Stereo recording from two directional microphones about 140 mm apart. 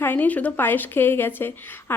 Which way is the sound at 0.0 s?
15° left (ahead or behind).